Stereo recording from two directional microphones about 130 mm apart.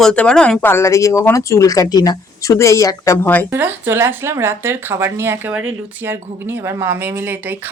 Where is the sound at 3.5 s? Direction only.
15° right (ahead or behind).